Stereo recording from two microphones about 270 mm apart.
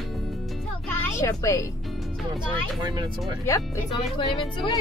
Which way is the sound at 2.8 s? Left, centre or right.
Centre.